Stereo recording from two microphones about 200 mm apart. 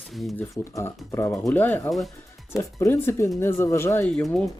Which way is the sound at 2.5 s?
15° left (ahead or behind).